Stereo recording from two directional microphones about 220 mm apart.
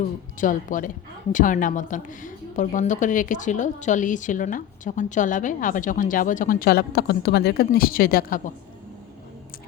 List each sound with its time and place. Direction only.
0.3 s a woman's voice: 35° left (ahead or behind)